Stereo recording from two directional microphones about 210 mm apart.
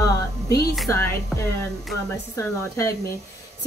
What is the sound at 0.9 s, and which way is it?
Speech, 10° left (ahead or behind).